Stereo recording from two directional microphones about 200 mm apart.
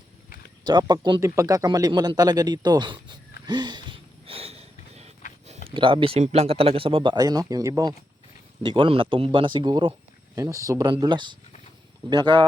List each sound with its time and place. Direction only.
0.6 s speech: 20° right (ahead or behind)
3.4 s sniff: 20° right (ahead or behind)
5.6 s speech: 25° right (ahead or behind)